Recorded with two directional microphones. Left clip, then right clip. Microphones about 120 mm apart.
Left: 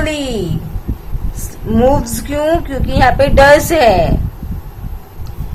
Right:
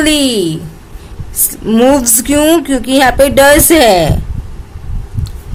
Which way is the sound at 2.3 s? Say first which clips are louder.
Right 5 dB; 90° right.